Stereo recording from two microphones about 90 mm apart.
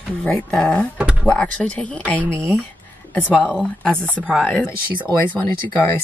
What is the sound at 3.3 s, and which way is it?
Speech, 15° left (ahead or behind).